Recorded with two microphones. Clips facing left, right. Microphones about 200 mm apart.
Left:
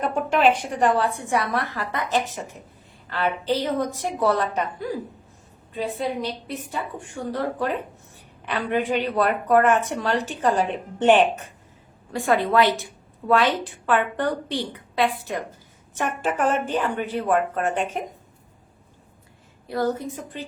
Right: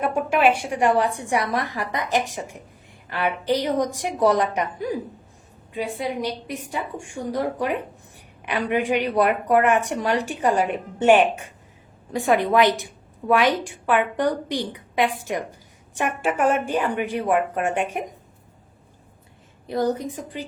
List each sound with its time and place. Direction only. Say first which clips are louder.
0.0 s a woman's voice: even; 10° right (ahead or behind)
19.6 s a woman's voice: right 1 dB; 20° right (ahead or behind)